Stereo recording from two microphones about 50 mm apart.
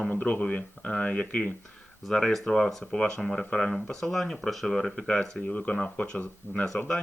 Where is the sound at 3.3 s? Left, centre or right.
Left.